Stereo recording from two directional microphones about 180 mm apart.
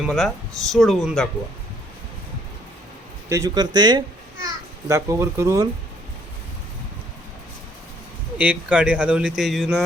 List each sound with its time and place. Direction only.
0.0 s speech: centre (ahead or behind)
3.2 s a child's voice: 20° right (ahead or behind)
8.4 s speech: 5° right (ahead or behind)